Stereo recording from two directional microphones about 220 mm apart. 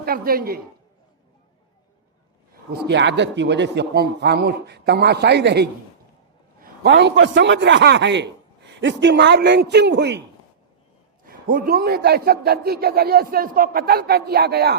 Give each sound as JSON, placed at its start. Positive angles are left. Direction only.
{"t": 0.0, "sound": "a woman's voice", "side_deg": -40}
{"t": 2.7, "sound": "a man's voice", "side_deg": -50}
{"t": 11.3, "sound": "a man's voice", "side_deg": -40}